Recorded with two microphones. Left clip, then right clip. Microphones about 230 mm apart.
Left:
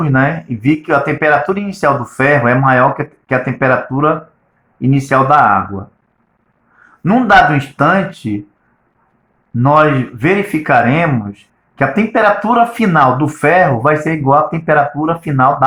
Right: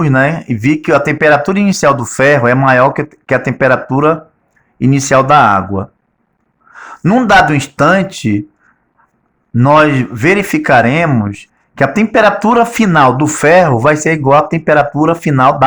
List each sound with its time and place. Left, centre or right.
0.0 s speech: right
6.8 s speech: right
9.6 s speech: right